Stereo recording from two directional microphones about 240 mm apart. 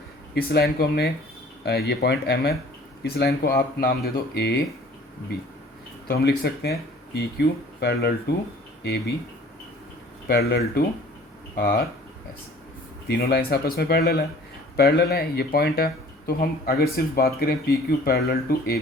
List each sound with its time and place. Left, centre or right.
0.3 s speech: left
10.2 s speech: left
13.1 s speech: left